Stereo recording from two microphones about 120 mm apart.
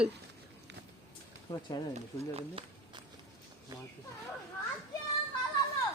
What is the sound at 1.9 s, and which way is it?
Speech, 55° right (ahead or behind).